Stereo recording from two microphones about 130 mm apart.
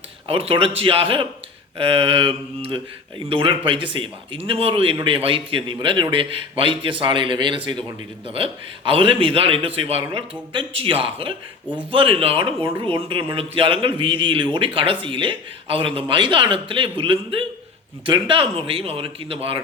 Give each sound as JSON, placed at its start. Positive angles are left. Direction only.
{"t": 0.3, "sound": "a man's voice", "side_deg": -45}